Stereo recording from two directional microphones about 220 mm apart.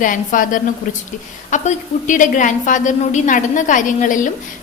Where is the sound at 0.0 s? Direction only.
35° left (ahead or behind).